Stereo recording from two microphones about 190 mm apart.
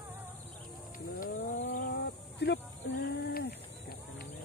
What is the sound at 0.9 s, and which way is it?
Wild animals, 45° left (ahead or behind).